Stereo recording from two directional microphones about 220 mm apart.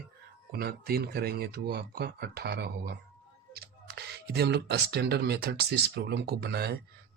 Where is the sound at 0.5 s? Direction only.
45° right (ahead or behind).